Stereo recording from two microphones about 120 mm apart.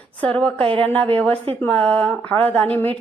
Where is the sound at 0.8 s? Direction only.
15° left (ahead or behind).